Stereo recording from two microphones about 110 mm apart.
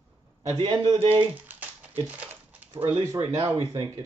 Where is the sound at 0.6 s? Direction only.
40° right (ahead or behind).